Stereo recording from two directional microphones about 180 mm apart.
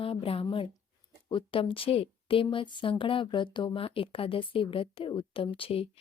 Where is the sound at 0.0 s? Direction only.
30° left (ahead or behind).